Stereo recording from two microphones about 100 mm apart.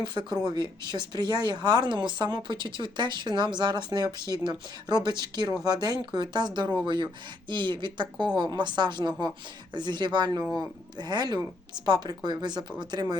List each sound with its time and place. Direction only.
0.0 s speech: 50° right (ahead or behind)